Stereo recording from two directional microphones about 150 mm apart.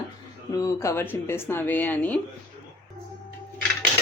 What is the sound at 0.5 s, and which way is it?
Speech, 20° left (ahead or behind).